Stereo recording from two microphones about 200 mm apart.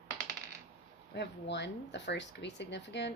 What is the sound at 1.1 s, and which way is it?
Speech, 60° left (ahead or behind).